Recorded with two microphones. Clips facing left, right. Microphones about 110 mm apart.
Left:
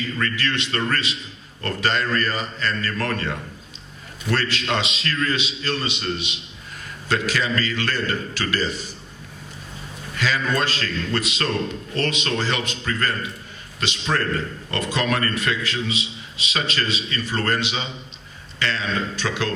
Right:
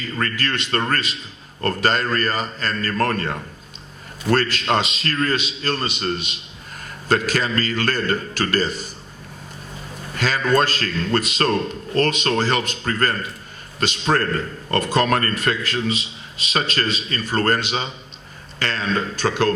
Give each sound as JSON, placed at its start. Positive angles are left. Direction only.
{"t": 0.2, "sound": "a man's voice", "side_deg": -40}
{"t": 10.2, "sound": "a man's voice", "side_deg": -45}